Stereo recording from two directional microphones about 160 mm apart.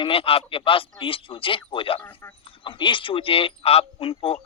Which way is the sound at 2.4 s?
30° left (ahead or behind).